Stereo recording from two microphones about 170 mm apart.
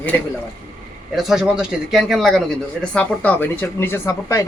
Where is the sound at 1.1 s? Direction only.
5° right (ahead or behind); by 4.4 s 15° left (ahead or behind).